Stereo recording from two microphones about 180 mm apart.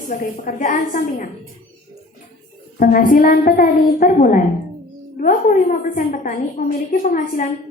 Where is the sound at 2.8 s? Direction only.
50° left (ahead or behind).